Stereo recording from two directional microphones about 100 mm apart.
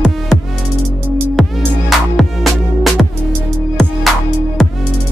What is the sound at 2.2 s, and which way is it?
Music, centre (ahead or behind).